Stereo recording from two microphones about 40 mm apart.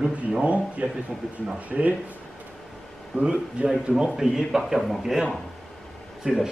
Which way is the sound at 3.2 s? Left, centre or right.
Centre.